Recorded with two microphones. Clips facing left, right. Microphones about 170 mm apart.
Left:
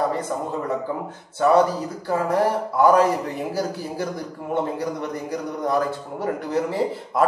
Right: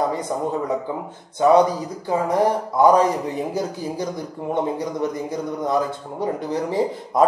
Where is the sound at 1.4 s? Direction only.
15° right (ahead or behind).